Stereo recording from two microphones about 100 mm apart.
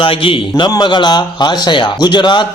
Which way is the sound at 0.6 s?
45° left (ahead or behind).